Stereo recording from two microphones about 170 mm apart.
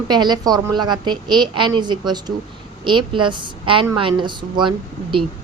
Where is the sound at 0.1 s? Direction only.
25° right (ahead or behind).